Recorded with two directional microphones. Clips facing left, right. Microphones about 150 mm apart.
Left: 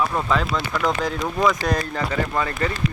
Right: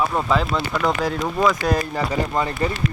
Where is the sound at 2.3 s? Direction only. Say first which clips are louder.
Right 2 dB; 20° right (ahead or behind).